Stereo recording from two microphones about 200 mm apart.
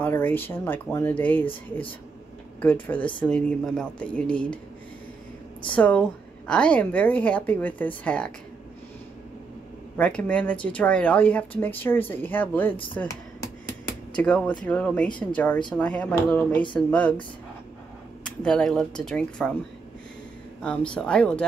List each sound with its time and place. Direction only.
0.0 s speech: 10° left (ahead or behind)
2.6 s speech: 10° left (ahead or behind)
5.8 s speech: 5° left (ahead or behind)
9.9 s speech: 5° left (ahead or behind)
18.2 s speech: 5° left (ahead or behind)
20.6 s speech: 5° left (ahead or behind)